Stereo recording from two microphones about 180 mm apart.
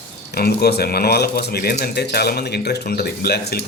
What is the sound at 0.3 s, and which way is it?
Speech, 60° left (ahead or behind).